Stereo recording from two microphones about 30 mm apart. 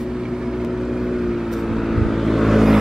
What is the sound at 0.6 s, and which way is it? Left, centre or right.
Vehicle, centre.